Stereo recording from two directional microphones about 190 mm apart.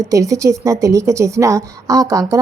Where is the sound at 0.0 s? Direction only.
15° right (ahead or behind).